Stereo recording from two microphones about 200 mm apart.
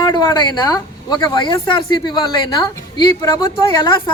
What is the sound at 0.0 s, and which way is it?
Speech, 20° left (ahead or behind).